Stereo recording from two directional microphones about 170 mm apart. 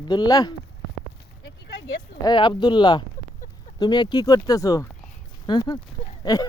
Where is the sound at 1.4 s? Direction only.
85° left.